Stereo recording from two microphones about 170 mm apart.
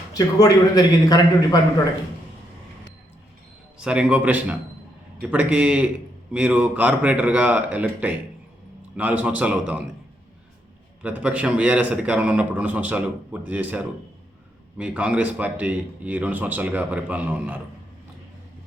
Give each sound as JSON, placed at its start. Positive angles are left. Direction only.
{"t": 0.1, "sound": "a man's voice", "side_deg": 20}
{"t": 3.8, "sound": "a man's voice", "side_deg": -5}
{"t": 11.0, "sound": "a man's voice", "side_deg": -5}